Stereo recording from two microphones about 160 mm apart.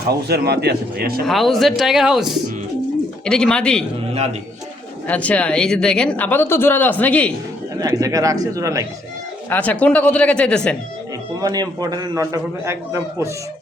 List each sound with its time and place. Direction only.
0.1 s speech: 85° right
1.2 s speech: centre (ahead or behind)
4.1 s a man's voice: 40° right (ahead or behind)
5.0 s speech: 10° left (ahead or behind)
7.8 s a man's voice: 20° right (ahead or behind)
9.5 s speech: 10° left (ahead or behind)
11.3 s a man's voice: 25° right (ahead or behind)